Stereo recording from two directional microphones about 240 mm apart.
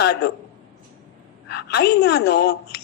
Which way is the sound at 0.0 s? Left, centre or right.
Left.